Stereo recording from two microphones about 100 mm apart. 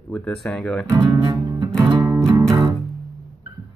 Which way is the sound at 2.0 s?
30° right (ahead or behind).